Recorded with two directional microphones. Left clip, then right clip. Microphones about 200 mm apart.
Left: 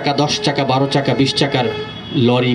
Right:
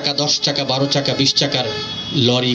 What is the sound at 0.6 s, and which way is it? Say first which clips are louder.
Speech: left 2 dB; 60° left (ahead or behind).